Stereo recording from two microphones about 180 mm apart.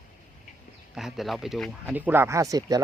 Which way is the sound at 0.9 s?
Centre (ahead or behind).